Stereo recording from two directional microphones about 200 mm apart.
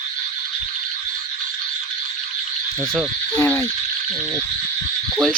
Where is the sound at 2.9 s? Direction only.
5° left (ahead or behind).